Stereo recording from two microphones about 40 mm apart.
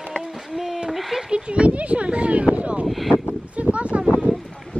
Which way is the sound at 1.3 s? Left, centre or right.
Right.